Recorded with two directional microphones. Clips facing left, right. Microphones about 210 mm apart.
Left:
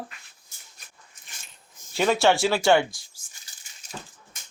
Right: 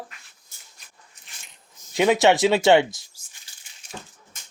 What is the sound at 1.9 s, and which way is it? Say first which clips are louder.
Speech: right 3 dB; 15° right (ahead or behind).